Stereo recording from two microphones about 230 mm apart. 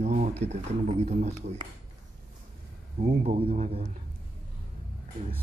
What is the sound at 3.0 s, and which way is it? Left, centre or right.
Speech, right.